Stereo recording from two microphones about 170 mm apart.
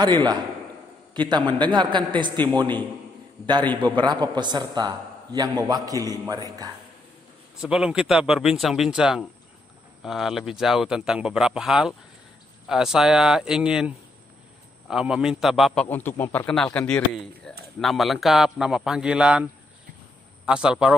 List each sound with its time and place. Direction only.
0.0 s a man's voice: 25° right (ahead or behind)
3.8 s a man's voice: 25° right (ahead or behind)
7.5 s a man's voice: 5° right (ahead or behind)
20.4 s a man's voice: 5° right (ahead or behind)